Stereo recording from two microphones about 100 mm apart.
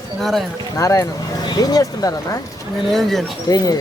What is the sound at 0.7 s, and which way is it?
Speech, 35° left (ahead or behind).